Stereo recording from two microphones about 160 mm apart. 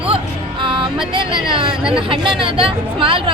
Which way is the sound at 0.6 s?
30° right (ahead or behind).